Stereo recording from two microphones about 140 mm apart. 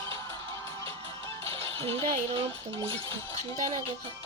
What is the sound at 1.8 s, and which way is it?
Speech, 40° right (ahead or behind).